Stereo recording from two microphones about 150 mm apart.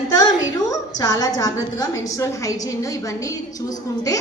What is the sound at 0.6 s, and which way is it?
A woman's voice, 25° left (ahead or behind).